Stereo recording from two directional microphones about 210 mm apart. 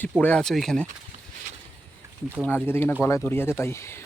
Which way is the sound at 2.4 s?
10° left (ahead or behind).